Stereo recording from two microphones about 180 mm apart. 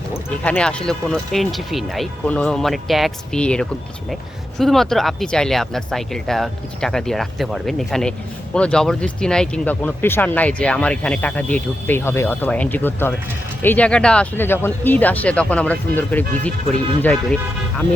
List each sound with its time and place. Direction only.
0.3 s speech: 5° left (ahead or behind)